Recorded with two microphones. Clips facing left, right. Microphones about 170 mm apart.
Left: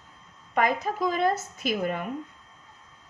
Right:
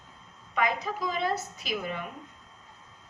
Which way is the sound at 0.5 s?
50° left (ahead or behind).